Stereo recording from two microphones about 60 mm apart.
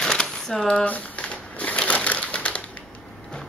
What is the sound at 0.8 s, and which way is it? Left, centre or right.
Crumpling, left.